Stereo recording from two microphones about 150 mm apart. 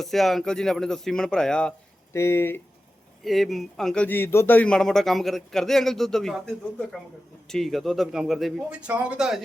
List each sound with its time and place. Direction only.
0.0 s speech: centre (ahead or behind)
2.1 s speech: 15° left (ahead or behind)
3.2 s speech: centre (ahead or behind)